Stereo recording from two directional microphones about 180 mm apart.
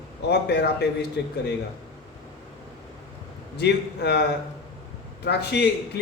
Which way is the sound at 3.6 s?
65° left (ahead or behind).